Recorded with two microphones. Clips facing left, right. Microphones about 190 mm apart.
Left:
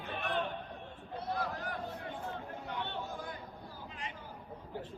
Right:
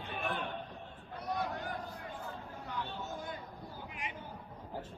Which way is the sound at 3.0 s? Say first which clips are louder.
Even; 25° right (ahead or behind).